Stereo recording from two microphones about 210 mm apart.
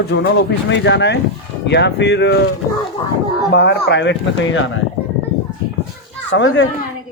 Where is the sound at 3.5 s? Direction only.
55° left (ahead or behind).